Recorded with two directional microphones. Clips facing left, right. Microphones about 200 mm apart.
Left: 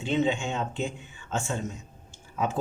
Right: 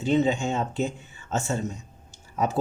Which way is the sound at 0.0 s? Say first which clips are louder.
Right 4 dB; 40° right (ahead or behind).